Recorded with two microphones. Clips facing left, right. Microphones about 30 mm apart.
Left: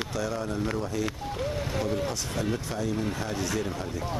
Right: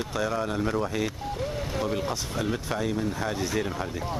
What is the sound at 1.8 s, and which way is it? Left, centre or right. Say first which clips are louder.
Speech: right 2 dB; centre.